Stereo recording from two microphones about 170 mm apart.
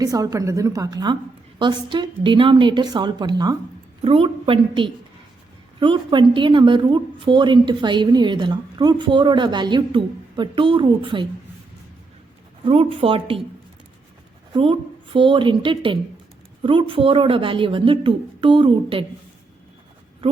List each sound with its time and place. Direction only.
0.0 s a woman's voice: 20° right (ahead or behind)
12.6 s a woman's voice: 35° right (ahead or behind)
14.5 s a woman's voice: 30° right (ahead or behind)
20.2 s a woman's voice: 35° right (ahead or behind)